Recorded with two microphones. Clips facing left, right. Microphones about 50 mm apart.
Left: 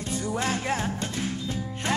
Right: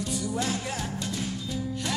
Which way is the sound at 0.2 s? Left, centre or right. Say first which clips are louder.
Left 5 dB; left.